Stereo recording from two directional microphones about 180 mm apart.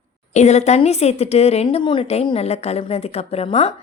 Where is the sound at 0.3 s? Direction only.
40° left (ahead or behind).